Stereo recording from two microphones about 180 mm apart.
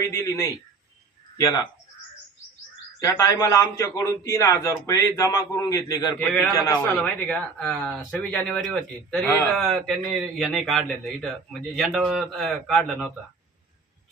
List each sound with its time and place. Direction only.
0.0 s a man's voice: 15° left (ahead or behind)
3.0 s a man's voice: 20° left (ahead or behind); by 13.1 s 5° left (ahead or behind)